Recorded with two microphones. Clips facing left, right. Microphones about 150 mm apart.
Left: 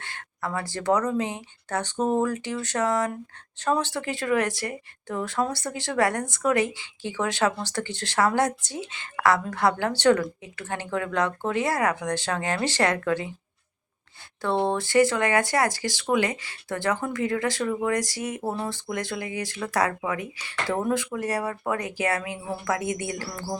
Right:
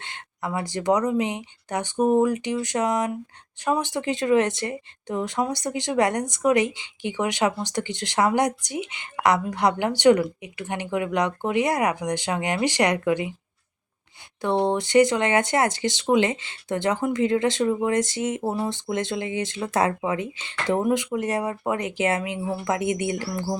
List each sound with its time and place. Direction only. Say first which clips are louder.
0.0 s speech: right 1 dB; 20° right (ahead or behind)
14.4 s speech: right 2 dB; 15° right (ahead or behind)